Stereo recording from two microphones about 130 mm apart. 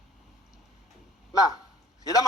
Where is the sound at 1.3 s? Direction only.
30° left (ahead or behind).